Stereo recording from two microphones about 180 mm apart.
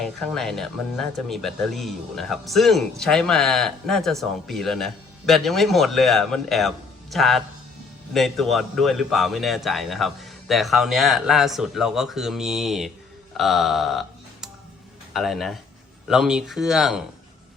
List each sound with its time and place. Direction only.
0.0 s speech: centre (ahead or behind)
13.3 s music: centre (ahead or behind)
15.1 s speech: centre (ahead or behind)